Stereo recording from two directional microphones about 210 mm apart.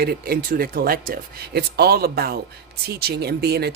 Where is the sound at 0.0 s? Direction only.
45° right (ahead or behind).